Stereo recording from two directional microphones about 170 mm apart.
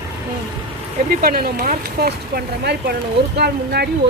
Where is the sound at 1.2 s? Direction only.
60° right (ahead or behind).